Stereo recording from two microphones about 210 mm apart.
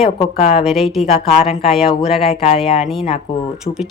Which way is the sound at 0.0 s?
30° left (ahead or behind).